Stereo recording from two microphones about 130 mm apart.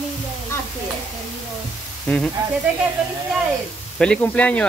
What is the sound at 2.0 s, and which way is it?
Speech, 5° left (ahead or behind).